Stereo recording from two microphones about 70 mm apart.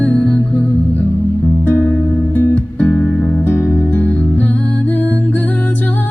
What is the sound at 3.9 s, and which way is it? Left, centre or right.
Music, left.